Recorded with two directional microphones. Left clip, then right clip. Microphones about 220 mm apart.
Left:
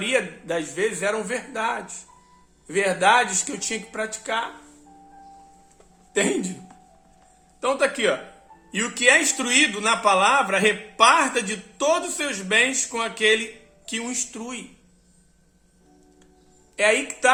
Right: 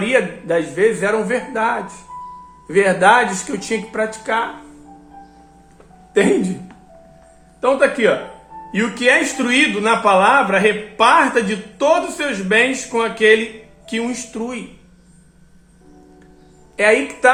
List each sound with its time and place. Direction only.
0.0 s speech: 15° left (ahead or behind)
6.1 s speech: 10° left (ahead or behind)
7.6 s speech: 15° left (ahead or behind)
16.7 s speech: 15° left (ahead or behind)